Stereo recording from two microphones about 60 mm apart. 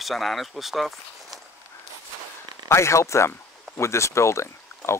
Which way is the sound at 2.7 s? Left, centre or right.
Left.